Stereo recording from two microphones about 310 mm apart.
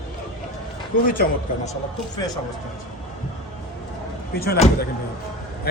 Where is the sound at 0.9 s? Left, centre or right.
Left.